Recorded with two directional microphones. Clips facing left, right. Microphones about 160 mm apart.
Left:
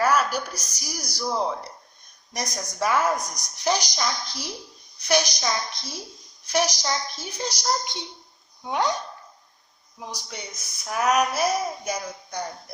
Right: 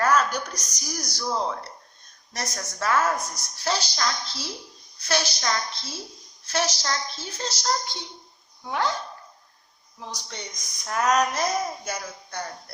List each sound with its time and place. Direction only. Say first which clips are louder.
0.0 s speech: even; 10° left (ahead or behind)
10.0 s speech: left 1 dB; 10° left (ahead or behind)